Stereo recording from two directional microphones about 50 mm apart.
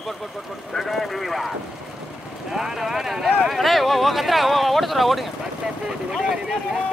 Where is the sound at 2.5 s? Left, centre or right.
Centre.